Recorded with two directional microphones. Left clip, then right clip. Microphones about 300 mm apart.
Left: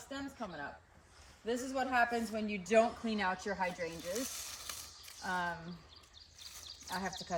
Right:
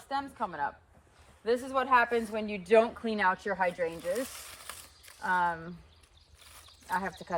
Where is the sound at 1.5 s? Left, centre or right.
Centre.